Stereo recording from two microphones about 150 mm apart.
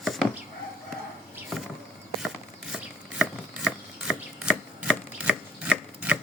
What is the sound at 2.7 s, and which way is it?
Chopping, 5° right (ahead or behind).